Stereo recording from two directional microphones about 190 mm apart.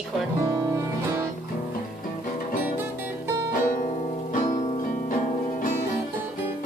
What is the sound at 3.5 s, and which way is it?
Music, 45° left (ahead or behind).